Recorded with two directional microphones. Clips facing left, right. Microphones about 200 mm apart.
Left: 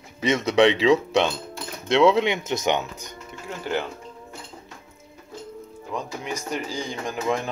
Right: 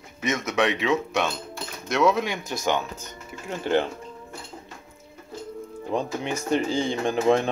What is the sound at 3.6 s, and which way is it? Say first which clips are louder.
Speech: right 5 dB; 20° right (ahead or behind).